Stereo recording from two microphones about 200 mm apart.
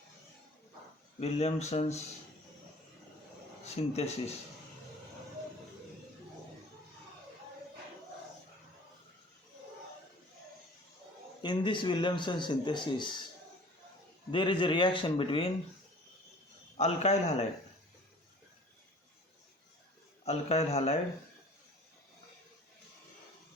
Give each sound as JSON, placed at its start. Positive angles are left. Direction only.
{"t": 1.2, "sound": "speech", "side_deg": 35}
{"t": 3.6, "sound": "speech", "side_deg": 30}
{"t": 11.4, "sound": "a man's voice", "side_deg": 25}
{"t": 14.3, "sound": "a man's voice", "side_deg": 25}
{"t": 16.7, "sound": "speech", "side_deg": 35}
{"t": 20.2, "sound": "speech", "side_deg": 30}